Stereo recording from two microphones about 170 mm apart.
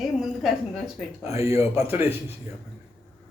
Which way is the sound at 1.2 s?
15° right (ahead or behind).